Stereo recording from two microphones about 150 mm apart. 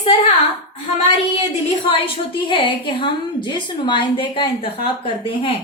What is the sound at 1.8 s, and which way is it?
A woman's voice, 35° left (ahead or behind).